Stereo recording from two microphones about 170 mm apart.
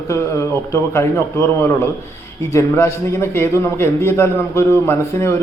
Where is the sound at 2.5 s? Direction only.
15° left (ahead or behind).